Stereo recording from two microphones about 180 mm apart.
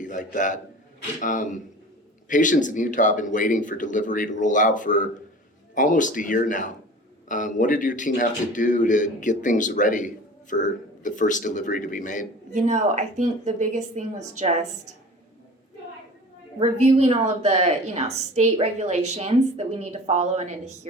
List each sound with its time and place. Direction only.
0.0 s a man's voice: 45° left (ahead or behind)
12.5 s a woman's voice: 40° right (ahead or behind)
16.6 s a woman's voice: 35° right (ahead or behind)